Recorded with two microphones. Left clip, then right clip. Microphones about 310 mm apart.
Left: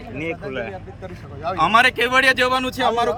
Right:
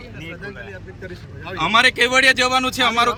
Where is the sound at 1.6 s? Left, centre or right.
Centre.